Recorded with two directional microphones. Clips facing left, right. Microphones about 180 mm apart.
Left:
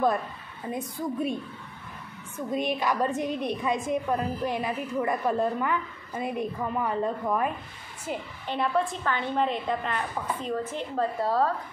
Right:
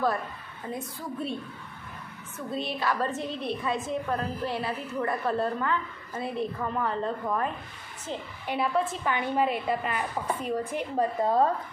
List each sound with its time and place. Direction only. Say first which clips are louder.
0.7 s a woman's voice: left 6 dB; 15° left (ahead or behind)
2.5 s a woman's voice: left 3 dB; 15° left (ahead or behind)
8.5 s a woman's voice: even; 5° right (ahead or behind); by 11.5 s 20° right (ahead or behind)